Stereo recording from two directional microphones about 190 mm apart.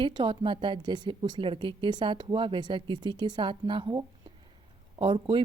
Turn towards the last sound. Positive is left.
turn(degrees=-25)  # may be behind; listen again after turning